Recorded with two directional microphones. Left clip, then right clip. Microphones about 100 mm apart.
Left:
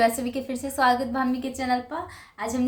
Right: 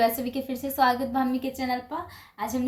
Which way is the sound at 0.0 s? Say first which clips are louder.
Left 2 dB; 5° right (ahead or behind).